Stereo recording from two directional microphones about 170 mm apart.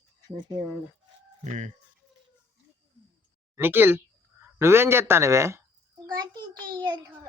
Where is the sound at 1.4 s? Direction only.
45° right (ahead or behind).